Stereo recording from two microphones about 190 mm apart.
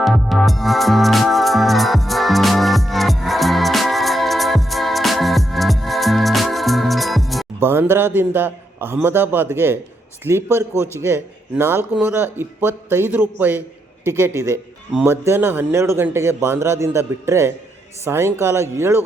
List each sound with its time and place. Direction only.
0.0 s music: centre (ahead or behind)
7.6 s speech: 10° right (ahead or behind)